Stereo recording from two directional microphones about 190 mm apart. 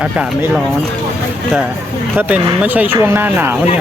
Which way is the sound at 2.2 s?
10° right (ahead or behind).